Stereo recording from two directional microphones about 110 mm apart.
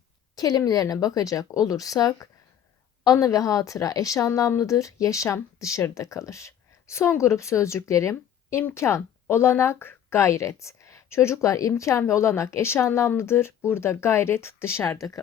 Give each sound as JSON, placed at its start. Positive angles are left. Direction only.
{"t": 0.3, "sound": "a woman's voice", "side_deg": 35}